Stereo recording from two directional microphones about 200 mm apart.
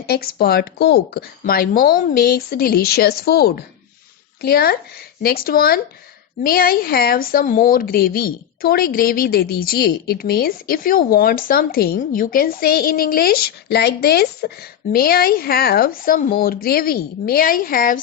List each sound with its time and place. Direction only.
0.1 s speech: 50° left (ahead or behind)